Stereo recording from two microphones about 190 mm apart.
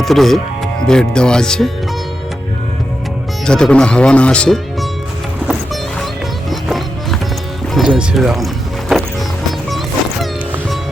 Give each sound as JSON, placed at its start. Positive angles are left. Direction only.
{"t": 0.0, "sound": "speech", "side_deg": 0}
{"t": 3.4, "sound": "speech", "side_deg": 5}
{"t": 6.5, "sound": "music", "side_deg": 0}
{"t": 7.7, "sound": "speech", "side_deg": 0}